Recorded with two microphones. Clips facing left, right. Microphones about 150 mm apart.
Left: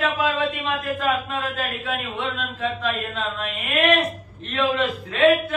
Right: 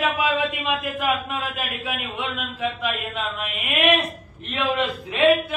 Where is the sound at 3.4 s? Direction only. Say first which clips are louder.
Left 1 dB; 15° right (ahead or behind).